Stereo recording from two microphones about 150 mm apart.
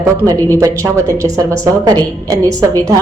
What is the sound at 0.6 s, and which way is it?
Speech, 20° right (ahead or behind).